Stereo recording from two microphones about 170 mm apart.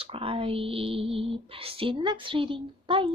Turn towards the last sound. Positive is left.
turn(degrees=-30)  # may be behind; listen again after turning